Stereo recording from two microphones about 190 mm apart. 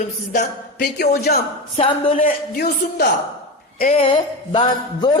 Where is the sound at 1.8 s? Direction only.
30° left (ahead or behind).